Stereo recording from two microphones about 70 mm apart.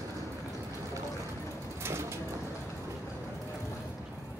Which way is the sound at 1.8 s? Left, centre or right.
Right.